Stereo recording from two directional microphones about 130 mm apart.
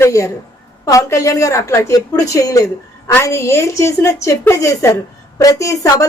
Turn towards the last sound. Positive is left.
turn(degrees=25)  # may be behind; listen again after turning